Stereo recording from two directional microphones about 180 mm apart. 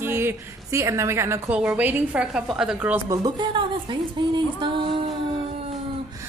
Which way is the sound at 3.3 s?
25° right (ahead or behind).